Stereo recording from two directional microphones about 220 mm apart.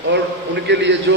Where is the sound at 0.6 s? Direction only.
50° right (ahead or behind).